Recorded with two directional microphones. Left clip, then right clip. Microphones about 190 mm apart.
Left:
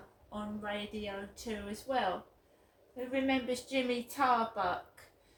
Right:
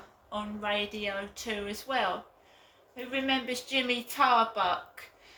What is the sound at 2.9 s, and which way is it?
Speech, 15° left (ahead or behind).